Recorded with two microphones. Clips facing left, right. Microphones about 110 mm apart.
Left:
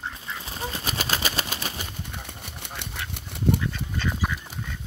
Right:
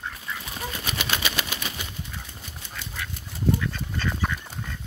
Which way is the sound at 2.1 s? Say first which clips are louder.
Left 2 dB; 65° left (ahead or behind).